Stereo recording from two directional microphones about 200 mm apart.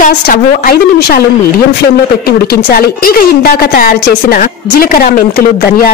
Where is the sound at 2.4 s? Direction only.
50° left (ahead or behind).